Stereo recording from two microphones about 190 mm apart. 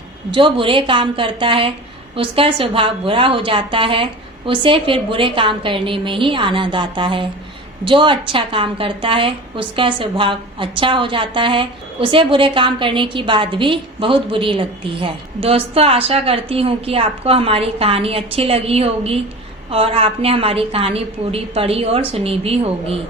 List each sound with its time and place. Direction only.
0.3 s a woman's voice: 25° right (ahead or behind)